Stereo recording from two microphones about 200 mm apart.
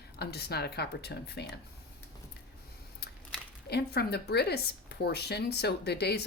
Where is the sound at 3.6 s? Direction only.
55° left (ahead or behind).